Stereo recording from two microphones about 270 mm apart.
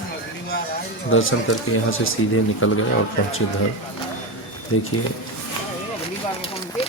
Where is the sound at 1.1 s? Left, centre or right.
Left.